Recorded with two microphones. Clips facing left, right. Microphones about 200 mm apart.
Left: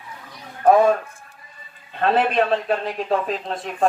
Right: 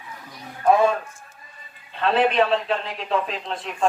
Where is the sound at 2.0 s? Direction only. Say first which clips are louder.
Even; 50° left (ahead or behind).